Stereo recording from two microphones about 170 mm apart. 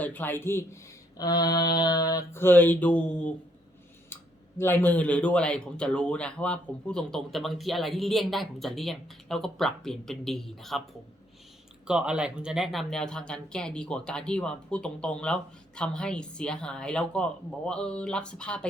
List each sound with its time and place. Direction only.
0.0 s speech: 10° left (ahead or behind)
1.2 s mantra: 25° left (ahead or behind); by 3.3 s 5° left (ahead or behind)
4.1 s speech: 15° left (ahead or behind)
11.9 s speech: 5° right (ahead or behind)